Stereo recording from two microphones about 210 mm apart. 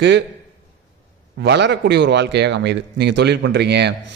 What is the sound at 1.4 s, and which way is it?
A man's voice, 55° right (ahead or behind).